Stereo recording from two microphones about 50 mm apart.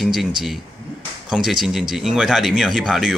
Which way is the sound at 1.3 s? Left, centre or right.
Centre.